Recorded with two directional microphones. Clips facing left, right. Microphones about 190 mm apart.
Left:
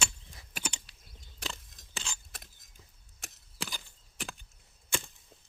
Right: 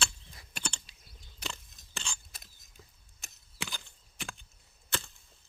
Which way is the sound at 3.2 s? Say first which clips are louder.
Left 6 dB; 80° left.